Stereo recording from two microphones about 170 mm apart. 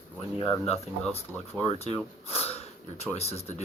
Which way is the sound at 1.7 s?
35° left (ahead or behind).